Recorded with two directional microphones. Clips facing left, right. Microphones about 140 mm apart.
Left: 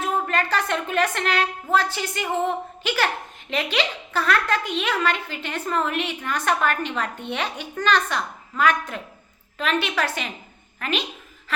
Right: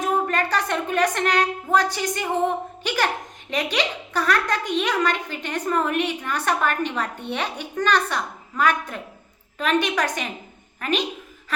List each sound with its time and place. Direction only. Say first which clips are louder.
0.0 s a woman's voice: right 2 dB; 10° right (ahead or behind)